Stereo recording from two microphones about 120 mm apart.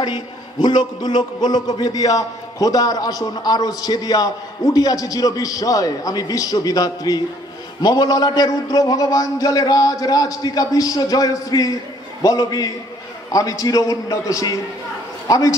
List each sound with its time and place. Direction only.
0.0 s a man's voice: 35° left (ahead or behind)